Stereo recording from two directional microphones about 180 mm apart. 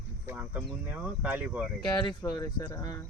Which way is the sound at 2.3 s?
20° left (ahead or behind).